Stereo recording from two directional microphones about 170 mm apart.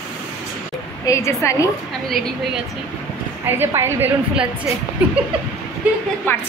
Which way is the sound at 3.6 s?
15° right (ahead or behind).